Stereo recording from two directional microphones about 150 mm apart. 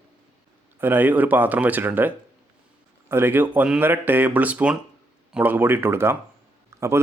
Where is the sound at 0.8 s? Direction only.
15° right (ahead or behind).